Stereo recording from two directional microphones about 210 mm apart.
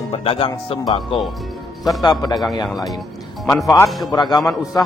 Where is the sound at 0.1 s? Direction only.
25° left (ahead or behind).